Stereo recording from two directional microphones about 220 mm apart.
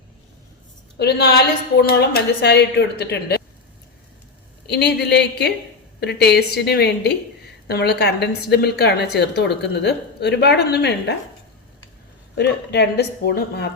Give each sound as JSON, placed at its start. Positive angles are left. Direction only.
{"t": 0.9, "sound": "a woman's voice", "side_deg": 50}
{"t": 4.6, "sound": "a woman's voice", "side_deg": 50}
{"t": 12.4, "sound": "a woman's voice", "side_deg": 50}